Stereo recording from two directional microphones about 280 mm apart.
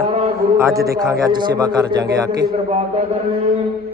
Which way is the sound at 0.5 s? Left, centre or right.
Centre.